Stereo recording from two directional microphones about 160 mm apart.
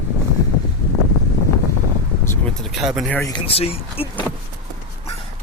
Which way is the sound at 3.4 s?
35° left (ahead or behind).